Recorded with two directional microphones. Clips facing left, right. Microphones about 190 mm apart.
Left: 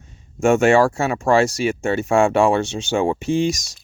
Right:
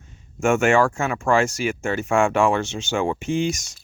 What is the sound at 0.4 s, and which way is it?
Speech, 35° left (ahead or behind).